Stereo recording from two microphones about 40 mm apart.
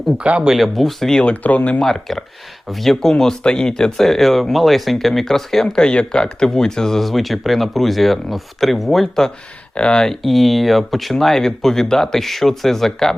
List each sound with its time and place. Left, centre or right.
0.2 s speech: right
0.6 s speech: centre
1.2 s speech: left
1.8 s speech: centre
5.7 s speech: left
7.1 s speech: centre
9.9 s speech: centre
10.2 s speech: centre